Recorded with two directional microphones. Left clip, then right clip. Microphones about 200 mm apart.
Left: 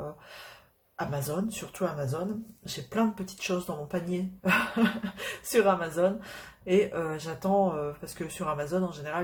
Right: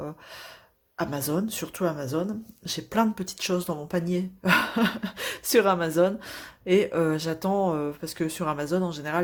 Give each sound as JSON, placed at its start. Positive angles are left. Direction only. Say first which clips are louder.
{"t": 0.9, "sound": "speech", "louder": "right 4 dB", "side_deg": -50}